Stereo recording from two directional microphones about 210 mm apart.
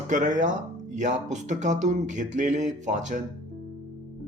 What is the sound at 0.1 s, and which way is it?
Speech, 35° right (ahead or behind).